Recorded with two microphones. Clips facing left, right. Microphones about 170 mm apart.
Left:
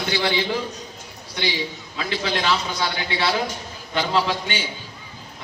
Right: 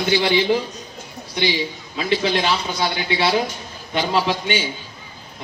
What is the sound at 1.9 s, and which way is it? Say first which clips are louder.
A man's voice: right 5 dB; 20° right (ahead or behind).